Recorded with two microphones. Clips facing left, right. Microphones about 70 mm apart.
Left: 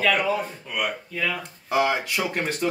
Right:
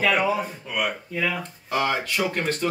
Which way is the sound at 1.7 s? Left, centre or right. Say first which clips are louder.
Left 2 dB; centre.